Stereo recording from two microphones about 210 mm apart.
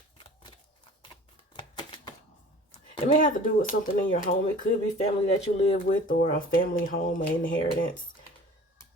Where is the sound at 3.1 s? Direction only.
40° left (ahead or behind).